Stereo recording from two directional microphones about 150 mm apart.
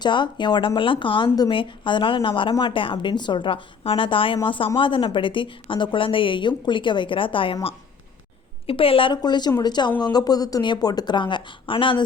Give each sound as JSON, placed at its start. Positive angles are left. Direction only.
{"t": 0.0, "sound": "speech", "side_deg": 30}